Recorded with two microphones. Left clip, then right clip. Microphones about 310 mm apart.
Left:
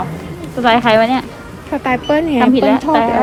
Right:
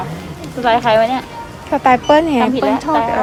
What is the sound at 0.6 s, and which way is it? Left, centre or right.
Speech, left.